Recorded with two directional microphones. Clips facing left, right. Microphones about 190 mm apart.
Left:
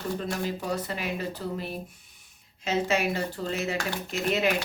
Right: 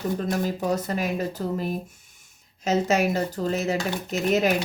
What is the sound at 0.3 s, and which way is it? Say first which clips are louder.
Speech: right 5 dB; 45° right (ahead or behind).